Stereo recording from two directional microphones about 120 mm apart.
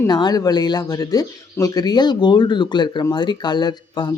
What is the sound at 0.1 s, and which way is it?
Speech, 35° left (ahead or behind).